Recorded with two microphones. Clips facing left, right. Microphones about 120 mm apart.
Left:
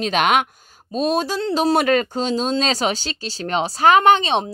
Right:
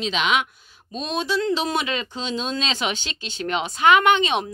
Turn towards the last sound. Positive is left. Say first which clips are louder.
# left 4 dB
turn(degrees=30)  # may be behind; listen again after turning